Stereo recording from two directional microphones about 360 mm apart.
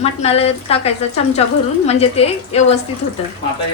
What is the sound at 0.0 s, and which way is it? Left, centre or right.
Speech, centre.